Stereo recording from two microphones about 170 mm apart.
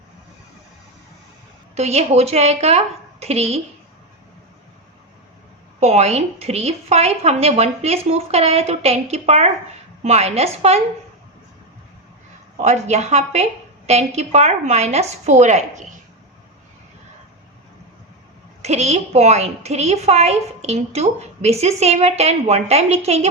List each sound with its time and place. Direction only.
1.7 s a woman's voice: 40° right (ahead or behind)
5.8 s a woman's voice: 40° right (ahead or behind)
12.5 s a woman's voice: 40° right (ahead or behind)
18.6 s a woman's voice: 40° right (ahead or behind)